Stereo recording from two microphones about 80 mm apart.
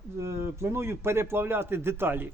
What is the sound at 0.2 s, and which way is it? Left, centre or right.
A man's voice, right.